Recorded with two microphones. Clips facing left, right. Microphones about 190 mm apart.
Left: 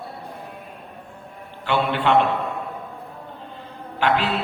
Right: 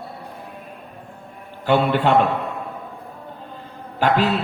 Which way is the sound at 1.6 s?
40° right (ahead or behind).